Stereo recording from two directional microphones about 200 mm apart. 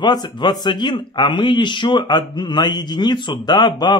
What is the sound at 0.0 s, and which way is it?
Speech, 20° left (ahead or behind).